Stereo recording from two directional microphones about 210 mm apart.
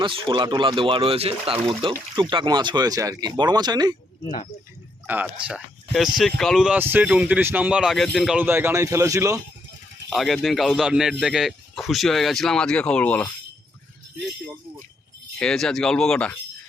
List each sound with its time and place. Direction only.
0.0 s speech: 20° right (ahead or behind)
5.0 s speech: 10° right (ahead or behind)
10.1 s speech: centre (ahead or behind)
15.4 s speech: 5° left (ahead or behind)